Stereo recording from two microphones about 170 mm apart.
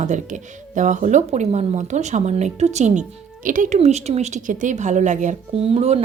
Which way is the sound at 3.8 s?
40° right (ahead or behind).